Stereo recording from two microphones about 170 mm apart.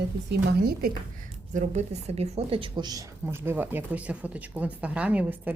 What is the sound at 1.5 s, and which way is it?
A woman's voice, 45° right (ahead or behind).